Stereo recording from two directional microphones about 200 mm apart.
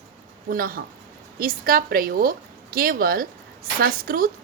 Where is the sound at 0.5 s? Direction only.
45° right (ahead or behind).